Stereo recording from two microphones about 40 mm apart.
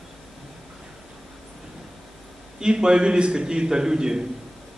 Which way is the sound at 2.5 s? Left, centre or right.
Centre.